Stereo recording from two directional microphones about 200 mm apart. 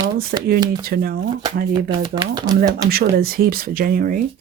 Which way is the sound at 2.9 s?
50° right (ahead or behind).